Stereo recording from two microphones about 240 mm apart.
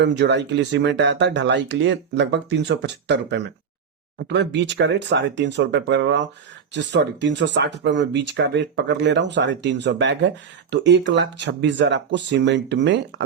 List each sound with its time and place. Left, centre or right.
0.0 s speech: right